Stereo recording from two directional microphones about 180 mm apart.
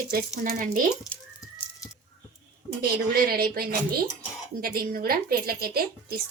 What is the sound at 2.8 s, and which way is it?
Speech, 60° right (ahead or behind).